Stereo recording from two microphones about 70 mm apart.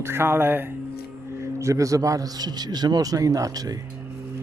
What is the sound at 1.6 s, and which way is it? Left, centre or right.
A man's voice, right.